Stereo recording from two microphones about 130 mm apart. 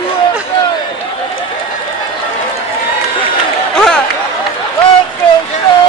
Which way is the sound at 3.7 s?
5° left (ahead or behind).